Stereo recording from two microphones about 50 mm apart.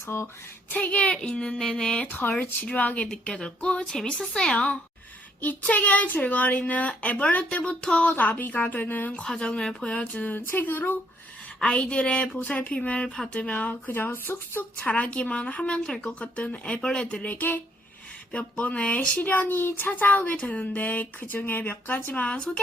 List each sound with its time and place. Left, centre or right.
0.0 s a sound: left
0.7 s speech: left
1.4 s a woman's voice: centre
2.6 s speech: left
3.1 s a woman's voice: centre
4.5 s speech: left
8.1 s speech: left
9.1 s a woman's voice: centre
10.1 s speech: left
11.6 s speech: left
14.9 s speech: left
19.1 s speech: left